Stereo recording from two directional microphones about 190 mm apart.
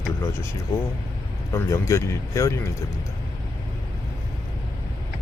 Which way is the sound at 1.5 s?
15° left (ahead or behind).